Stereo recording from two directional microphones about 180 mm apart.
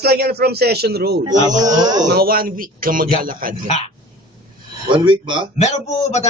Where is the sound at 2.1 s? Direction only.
55° right (ahead or behind).